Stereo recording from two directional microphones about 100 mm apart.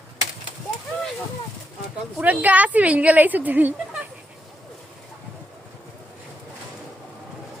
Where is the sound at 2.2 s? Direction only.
15° right (ahead or behind).